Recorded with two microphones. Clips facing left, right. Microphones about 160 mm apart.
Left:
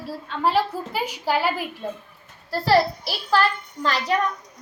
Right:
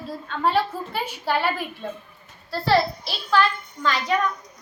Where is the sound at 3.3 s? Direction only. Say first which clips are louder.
Even; 35° left (ahead or behind).